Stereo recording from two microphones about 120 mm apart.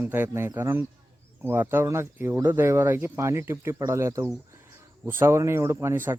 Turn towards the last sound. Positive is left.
turn(degrees=-20)  # may be behind; listen again after turning